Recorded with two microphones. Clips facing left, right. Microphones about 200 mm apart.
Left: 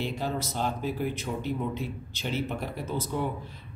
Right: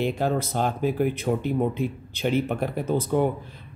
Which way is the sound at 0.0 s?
55° right (ahead or behind).